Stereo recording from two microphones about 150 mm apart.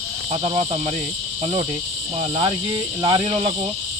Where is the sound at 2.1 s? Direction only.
35° right (ahead or behind).